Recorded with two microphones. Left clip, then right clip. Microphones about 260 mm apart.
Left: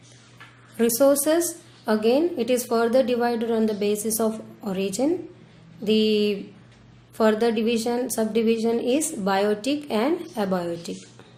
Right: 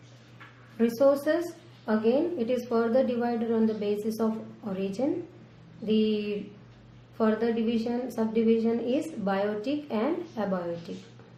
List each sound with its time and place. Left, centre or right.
0.8 s a woman's voice: left